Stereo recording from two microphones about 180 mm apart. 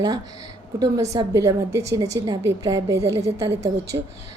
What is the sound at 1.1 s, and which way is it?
A woman's voice, 20° right (ahead or behind).